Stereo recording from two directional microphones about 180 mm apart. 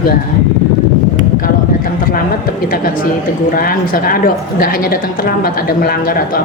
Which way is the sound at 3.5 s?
55° left (ahead or behind).